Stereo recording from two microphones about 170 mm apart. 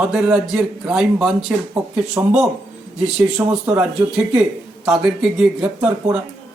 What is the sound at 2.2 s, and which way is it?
Speech, 15° right (ahead or behind).